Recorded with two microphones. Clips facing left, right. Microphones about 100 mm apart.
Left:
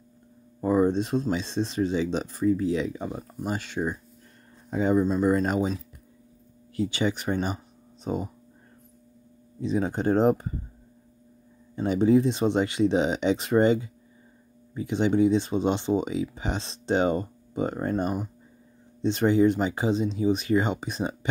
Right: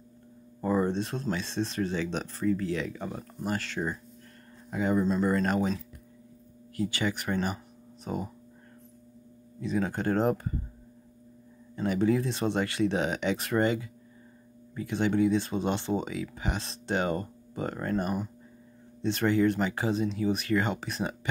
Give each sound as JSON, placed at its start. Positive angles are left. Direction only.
{"t": 0.6, "sound": "speech", "side_deg": 15}
{"t": 4.6, "sound": "speech", "side_deg": 25}
{"t": 5.0, "sound": "speech", "side_deg": 15}
{"t": 6.8, "sound": "speech", "side_deg": 20}
{"t": 9.6, "sound": "speech", "side_deg": 20}
{"t": 11.7, "sound": "speech", "side_deg": 20}